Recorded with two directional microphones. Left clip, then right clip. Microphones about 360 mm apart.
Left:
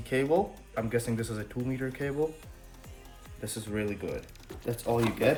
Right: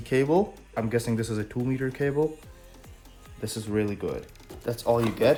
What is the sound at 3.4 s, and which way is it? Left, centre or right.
Speech, right.